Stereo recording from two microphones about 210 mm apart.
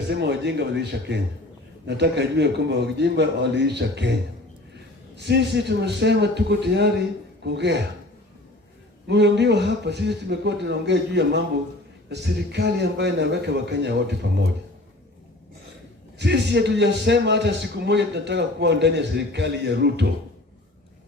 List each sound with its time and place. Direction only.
0.1 s a man's voice: 55° right (ahead or behind)
5.1 s a man's voice: 55° right (ahead or behind)
9.0 s a man's voice: 55° right (ahead or behind)
16.1 s a man's voice: 55° right (ahead or behind)